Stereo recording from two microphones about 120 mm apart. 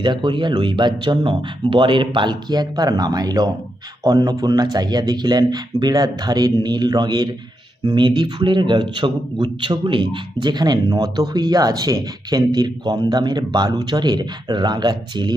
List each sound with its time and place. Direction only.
0.0 s speech: 40° right (ahead or behind)